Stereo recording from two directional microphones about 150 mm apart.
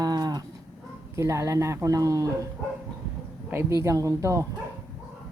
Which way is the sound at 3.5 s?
15° right (ahead or behind).